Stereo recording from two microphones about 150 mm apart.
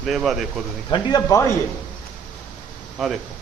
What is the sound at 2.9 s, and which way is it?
Speech, centre (ahead or behind).